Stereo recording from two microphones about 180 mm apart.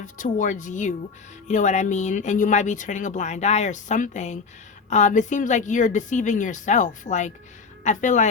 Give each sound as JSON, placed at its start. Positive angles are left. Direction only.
{"t": 0.0, "sound": "a woman's voice", "side_deg": 45}